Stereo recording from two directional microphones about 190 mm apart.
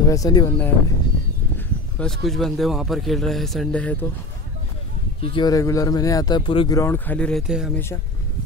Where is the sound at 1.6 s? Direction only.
5° left (ahead or behind).